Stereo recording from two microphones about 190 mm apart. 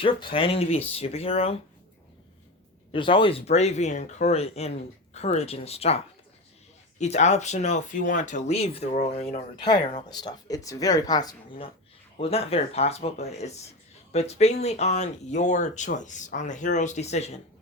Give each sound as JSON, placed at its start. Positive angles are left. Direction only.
{"t": 0.0, "sound": "speech", "side_deg": 30}
{"t": 2.9, "sound": "speech", "side_deg": 25}
{"t": 7.0, "sound": "speech", "side_deg": 35}
{"t": 10.1, "sound": "speech", "side_deg": 20}